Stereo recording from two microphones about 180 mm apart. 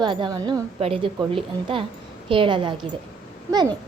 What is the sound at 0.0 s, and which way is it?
A woman's voice, 25° right (ahead or behind).